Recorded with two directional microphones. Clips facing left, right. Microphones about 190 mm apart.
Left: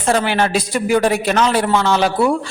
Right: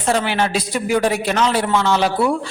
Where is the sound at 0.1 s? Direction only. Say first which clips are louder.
Left 2 dB; 50° left (ahead or behind).